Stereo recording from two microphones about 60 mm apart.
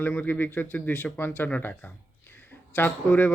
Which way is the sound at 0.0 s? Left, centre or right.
Left.